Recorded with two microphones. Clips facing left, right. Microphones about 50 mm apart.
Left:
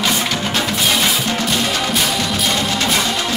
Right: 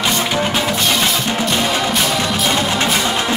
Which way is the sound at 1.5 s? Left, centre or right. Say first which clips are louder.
Right 2 dB; centre.